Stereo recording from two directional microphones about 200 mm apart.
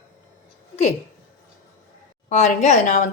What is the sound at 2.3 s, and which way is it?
Speech, 35° left (ahead or behind).